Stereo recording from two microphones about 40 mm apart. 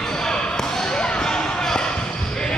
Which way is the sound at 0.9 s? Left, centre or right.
Left.